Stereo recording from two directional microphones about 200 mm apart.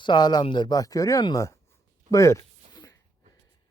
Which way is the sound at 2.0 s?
15° left (ahead or behind).